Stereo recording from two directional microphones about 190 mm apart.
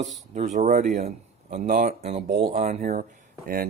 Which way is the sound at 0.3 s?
40° right (ahead or behind).